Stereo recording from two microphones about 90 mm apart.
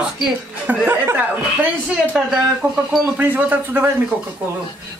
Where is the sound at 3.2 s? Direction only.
20° right (ahead or behind).